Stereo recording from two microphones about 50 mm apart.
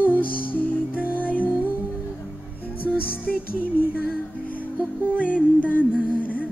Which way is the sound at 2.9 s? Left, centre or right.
Right.